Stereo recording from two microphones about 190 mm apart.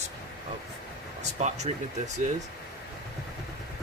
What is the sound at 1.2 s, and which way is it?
Speech, 35° right (ahead or behind).